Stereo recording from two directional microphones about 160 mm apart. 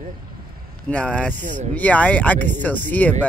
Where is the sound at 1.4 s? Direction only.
50° right (ahead or behind).